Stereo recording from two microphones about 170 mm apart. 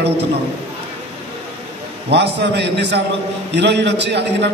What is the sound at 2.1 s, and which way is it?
A man's voice, 85° right.